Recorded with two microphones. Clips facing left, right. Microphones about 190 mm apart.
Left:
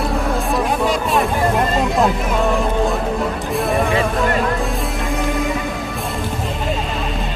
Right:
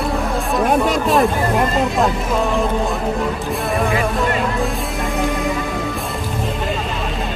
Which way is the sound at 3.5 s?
Centre (ahead or behind).